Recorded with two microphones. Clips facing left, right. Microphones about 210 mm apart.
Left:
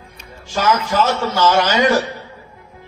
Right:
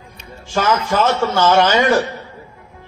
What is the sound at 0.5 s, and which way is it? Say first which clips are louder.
A man's voice: even; 55° right (ahead or behind).